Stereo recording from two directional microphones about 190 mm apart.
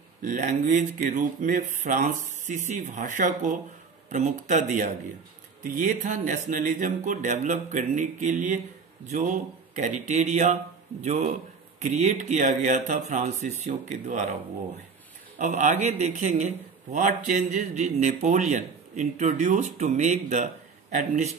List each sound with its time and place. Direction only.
0.2 s a man's voice: 45° right (ahead or behind)
15.3 s a man's voice: 40° right (ahead or behind)